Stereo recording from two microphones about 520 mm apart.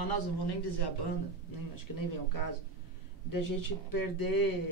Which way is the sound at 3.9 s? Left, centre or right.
Left.